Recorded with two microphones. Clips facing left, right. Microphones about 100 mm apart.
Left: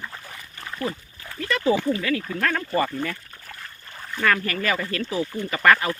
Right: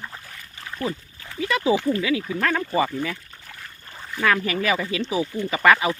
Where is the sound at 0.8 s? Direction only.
Centre (ahead or behind).